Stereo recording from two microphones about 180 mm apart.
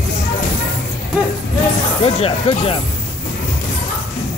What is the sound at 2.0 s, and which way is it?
Speech, 30° left (ahead or behind).